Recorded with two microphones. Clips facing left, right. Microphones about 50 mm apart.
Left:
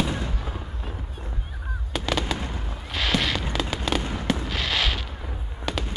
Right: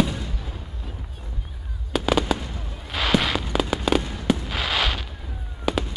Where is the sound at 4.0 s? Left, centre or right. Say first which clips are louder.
Left 1 dB; left.